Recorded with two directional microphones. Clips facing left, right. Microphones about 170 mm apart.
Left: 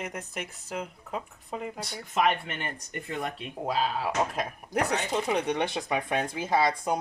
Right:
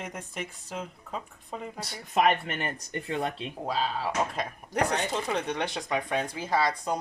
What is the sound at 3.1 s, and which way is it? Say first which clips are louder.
Speech: right 3 dB; 30° right (ahead or behind).